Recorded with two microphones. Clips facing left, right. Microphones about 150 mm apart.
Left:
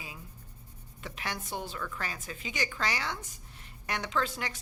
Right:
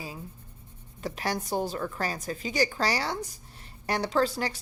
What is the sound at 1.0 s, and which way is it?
A woman's voice, 35° right (ahead or behind).